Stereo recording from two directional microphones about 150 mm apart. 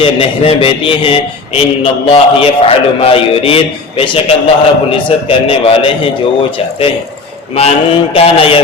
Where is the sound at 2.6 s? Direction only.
40° left (ahead or behind).